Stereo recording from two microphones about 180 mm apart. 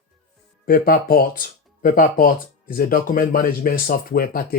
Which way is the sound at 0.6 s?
55° left (ahead or behind).